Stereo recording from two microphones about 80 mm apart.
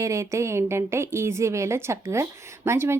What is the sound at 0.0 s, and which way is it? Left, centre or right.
A woman's voice, right.